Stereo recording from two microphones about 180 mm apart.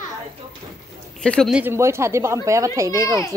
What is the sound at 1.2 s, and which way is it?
Speech, 5° left (ahead or behind).